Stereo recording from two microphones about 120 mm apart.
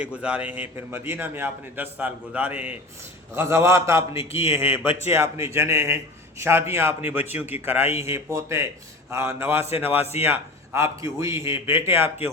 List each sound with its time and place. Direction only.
0.0 s a man's voice: 10° right (ahead or behind)
3.3 s a man's voice: 25° right (ahead or behind)